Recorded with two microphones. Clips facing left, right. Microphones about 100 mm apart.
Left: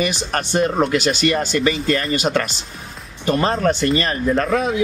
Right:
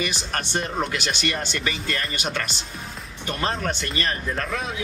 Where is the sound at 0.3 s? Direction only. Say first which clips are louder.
Left 8 dB; 45° left (ahead or behind).